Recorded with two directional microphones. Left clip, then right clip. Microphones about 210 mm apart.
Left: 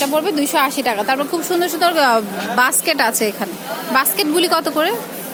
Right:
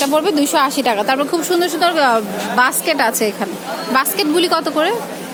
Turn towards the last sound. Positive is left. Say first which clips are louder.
# right 1 dB
turn(degrees=5)  # may be behind; listen again after turning